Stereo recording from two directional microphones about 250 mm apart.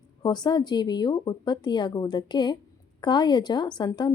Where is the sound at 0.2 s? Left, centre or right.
Centre.